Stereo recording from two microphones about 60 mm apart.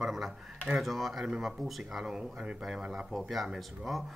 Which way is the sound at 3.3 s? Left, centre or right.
Centre.